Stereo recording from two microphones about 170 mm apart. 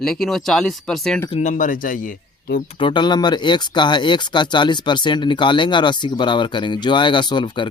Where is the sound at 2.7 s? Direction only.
30° left (ahead or behind).